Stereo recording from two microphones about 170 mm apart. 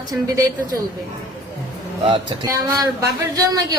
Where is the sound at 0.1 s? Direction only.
20° right (ahead or behind).